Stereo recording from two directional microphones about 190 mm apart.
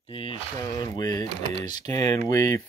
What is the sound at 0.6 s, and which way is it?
Speech, 20° left (ahead or behind).